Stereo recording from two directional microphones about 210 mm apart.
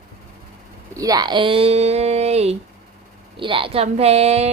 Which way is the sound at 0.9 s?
15° right (ahead or behind).